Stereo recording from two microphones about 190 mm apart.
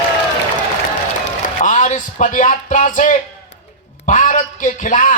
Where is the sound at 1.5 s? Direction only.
40° left (ahead or behind).